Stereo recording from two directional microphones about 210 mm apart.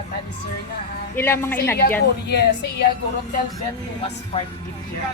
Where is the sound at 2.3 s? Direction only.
50° left (ahead or behind).